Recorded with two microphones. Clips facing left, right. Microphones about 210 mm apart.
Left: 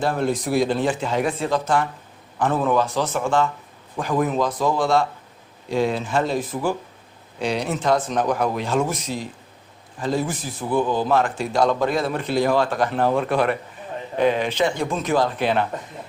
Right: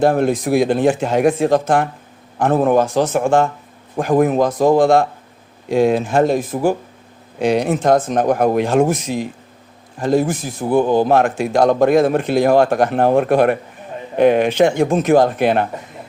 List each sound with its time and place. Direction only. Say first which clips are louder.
0.0 s speech: right 7 dB; 50° right (ahead or behind)
10.9 s speech: right 6 dB; 60° right (ahead or behind)